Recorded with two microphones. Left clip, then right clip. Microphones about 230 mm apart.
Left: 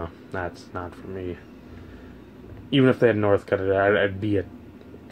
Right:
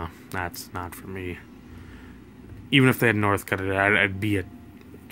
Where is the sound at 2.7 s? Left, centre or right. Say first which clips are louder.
Left 1 dB; right.